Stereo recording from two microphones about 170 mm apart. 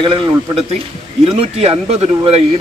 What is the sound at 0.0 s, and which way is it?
A man's voice, 30° right (ahead or behind).